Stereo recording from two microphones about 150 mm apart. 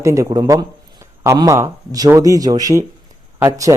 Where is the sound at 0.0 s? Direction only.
20° right (ahead or behind).